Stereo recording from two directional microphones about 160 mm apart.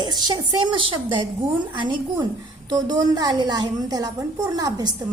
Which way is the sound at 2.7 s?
25° right (ahead or behind).